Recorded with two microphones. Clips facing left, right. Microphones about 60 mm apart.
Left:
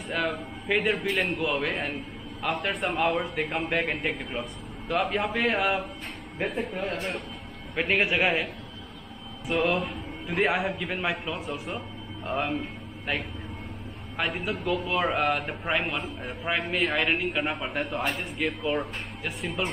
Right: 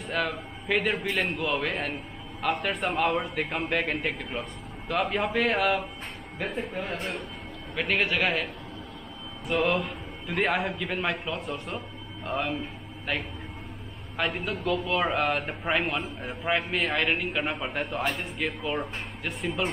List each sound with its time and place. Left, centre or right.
0.1 s a man's voice: centre
6.9 s a man's voice: centre
7.7 s a man's voice: centre
9.5 s a man's voice: centre